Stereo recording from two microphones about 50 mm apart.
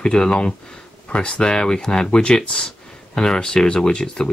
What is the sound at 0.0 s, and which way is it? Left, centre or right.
Speech, centre.